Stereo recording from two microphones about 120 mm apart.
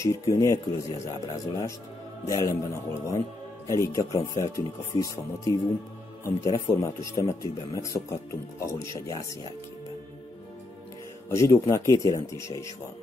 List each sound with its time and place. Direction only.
0.0 s a man's voice: 25° left (ahead or behind)
11.2 s a man's voice: 25° left (ahead or behind)